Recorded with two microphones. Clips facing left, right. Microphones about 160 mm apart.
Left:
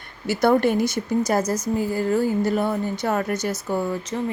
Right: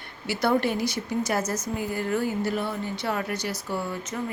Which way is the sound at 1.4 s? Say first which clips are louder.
Left 6 dB; 10° left (ahead or behind).